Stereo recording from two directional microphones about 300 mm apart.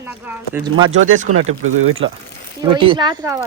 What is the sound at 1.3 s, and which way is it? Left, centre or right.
Speech, right.